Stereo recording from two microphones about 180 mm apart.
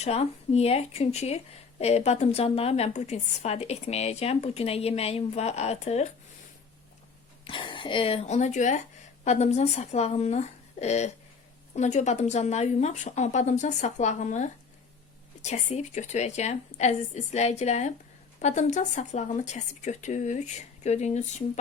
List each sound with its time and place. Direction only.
0.0 s a woman's voice: 35° left (ahead or behind)
7.4 s a woman's voice: 25° left (ahead or behind)